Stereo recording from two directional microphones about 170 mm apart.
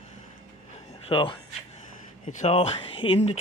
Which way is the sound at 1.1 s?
30° left (ahead or behind).